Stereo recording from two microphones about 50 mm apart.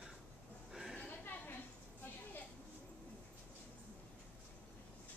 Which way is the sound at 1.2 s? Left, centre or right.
Left.